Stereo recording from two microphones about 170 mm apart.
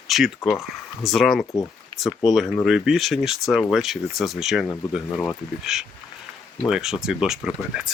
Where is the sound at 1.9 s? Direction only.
35° right (ahead or behind).